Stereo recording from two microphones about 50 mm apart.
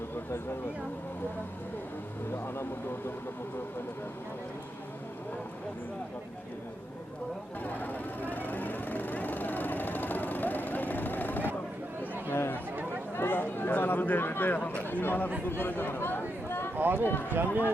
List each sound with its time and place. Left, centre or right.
7.6 s vehicle: left
12.3 s chatter: left
13.1 s a sound: left
14.8 s speech: left
15.4 s chatter: left
16.7 s speech: right